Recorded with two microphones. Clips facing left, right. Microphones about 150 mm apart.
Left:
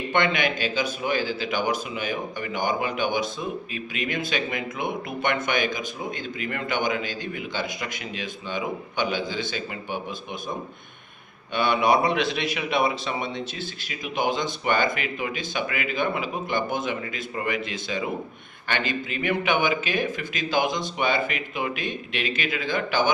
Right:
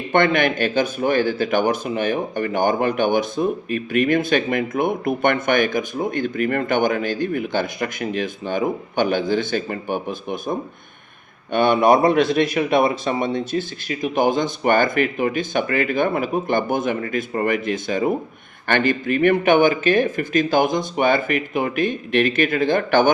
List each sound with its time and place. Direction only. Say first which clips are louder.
0.1 s speech: right 7 dB; 50° right (ahead or behind)
11.5 s speech: right 6 dB; 50° right (ahead or behind)